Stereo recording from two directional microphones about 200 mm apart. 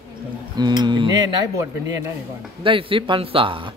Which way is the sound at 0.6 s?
20° right (ahead or behind).